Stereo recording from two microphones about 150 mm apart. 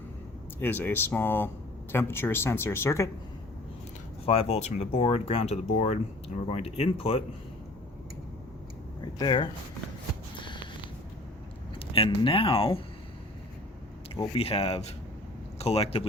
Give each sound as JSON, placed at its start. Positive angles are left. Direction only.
{"t": 0.6, "sound": "speech", "side_deg": 15}
{"t": 4.3, "sound": "speech", "side_deg": 40}
{"t": 9.1, "sound": "speech", "side_deg": 30}
{"t": 10.3, "sound": "a sound", "side_deg": 35}
{"t": 11.9, "sound": "speech", "side_deg": 35}
{"t": 14.3, "sound": "speech", "side_deg": 40}